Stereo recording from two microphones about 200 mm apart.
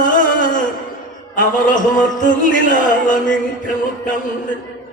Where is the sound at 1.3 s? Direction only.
40° left (ahead or behind).